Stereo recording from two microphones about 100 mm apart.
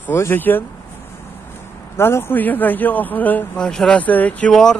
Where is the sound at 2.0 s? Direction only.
25° left (ahead or behind).